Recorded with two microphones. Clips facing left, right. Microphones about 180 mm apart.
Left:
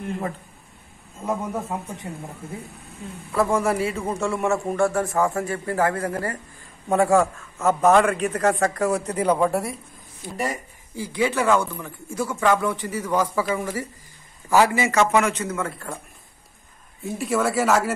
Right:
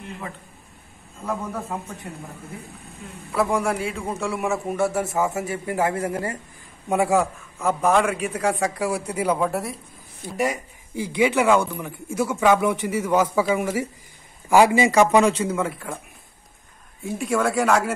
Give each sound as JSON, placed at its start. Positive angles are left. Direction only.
{"t": 1.2, "sound": "a man's voice", "side_deg": 20}
{"t": 3.3, "sound": "a man's voice", "side_deg": 0}
{"t": 7.5, "sound": "a man's voice", "side_deg": 0}
{"t": 10.3, "sound": "speech", "side_deg": -15}
{"t": 17.0, "sound": "a man's voice", "side_deg": 0}